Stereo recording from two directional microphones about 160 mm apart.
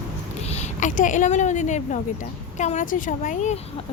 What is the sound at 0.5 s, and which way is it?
A woman's voice, 50° left (ahead or behind).